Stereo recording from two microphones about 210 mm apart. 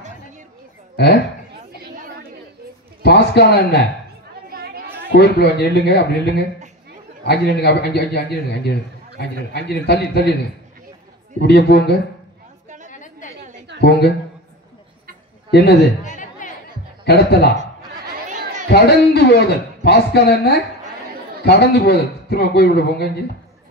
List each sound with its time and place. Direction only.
3.0 s a man's voice: 50° left (ahead or behind)
4.5 s chatter: 45° right (ahead or behind)
5.1 s a man's voice: 50° left (ahead or behind)
11.4 s a man's voice: 50° left (ahead or behind)
12.6 s chatter: 35° right (ahead or behind)
12.9 s chatter: 40° left (ahead or behind)
13.7 s a woman's voice: 50° left (ahead or behind)
15.5 s a man's voice: 50° left (ahead or behind)
16.2 s a sound: 40° left (ahead or behind)
17.0 s speech: 50° left (ahead or behind)
18.7 s a man's voice: 50° left (ahead or behind)